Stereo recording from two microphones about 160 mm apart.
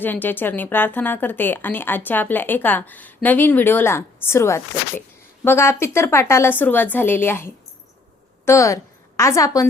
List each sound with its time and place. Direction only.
0.0 s a woman's voice: 10° left (ahead or behind)